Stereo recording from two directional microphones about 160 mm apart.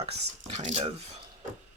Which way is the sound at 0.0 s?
40° right (ahead or behind).